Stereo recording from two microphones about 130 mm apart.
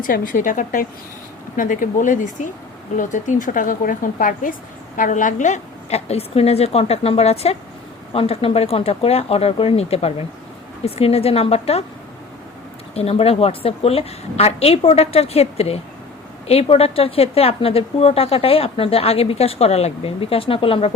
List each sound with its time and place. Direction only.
0.0 s a woman's voice: 90° left; by 11.8 s 50° left (ahead or behind)
12.9 s a woman's voice: 50° left (ahead or behind)